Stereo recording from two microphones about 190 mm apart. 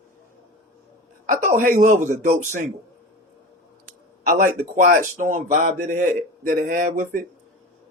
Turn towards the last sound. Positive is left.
turn(degrees=-45)  # may be behind; listen again after turning